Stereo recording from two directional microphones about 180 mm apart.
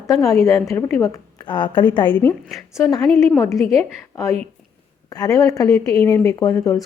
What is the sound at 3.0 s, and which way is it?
Speech, centre (ahead or behind).